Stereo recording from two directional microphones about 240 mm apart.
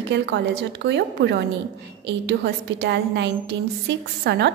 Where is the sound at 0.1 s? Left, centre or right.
Right.